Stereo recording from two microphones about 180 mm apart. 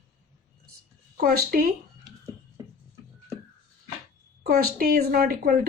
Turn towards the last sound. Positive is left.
turn(degrees=-55)  # may be behind; listen again after turning